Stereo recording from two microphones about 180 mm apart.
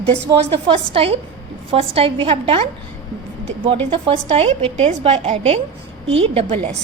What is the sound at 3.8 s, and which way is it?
A woman's voice, 30° right (ahead or behind).